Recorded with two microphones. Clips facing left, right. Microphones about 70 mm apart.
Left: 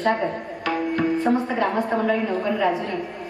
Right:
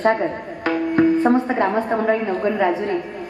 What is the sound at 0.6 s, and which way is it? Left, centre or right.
Tabla, right.